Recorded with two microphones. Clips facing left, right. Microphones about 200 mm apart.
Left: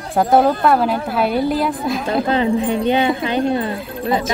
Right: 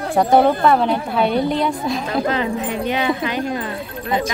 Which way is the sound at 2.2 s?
30° left (ahead or behind).